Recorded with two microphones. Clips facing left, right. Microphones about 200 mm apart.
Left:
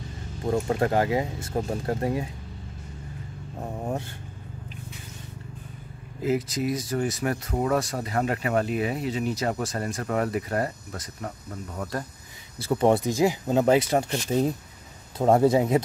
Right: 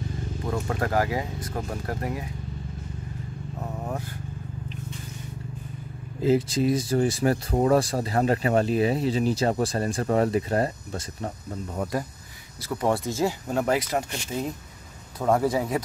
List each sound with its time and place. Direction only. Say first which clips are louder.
0.5 s speech: left 4 dB; 25° left (ahead or behind)
6.2 s speech: right 4 dB; 30° right (ahead or behind)
12.6 s speech: left 4 dB; 25° left (ahead or behind)